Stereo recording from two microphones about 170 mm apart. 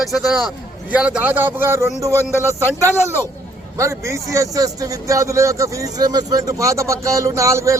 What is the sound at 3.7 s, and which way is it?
A man's voice, 15° right (ahead or behind).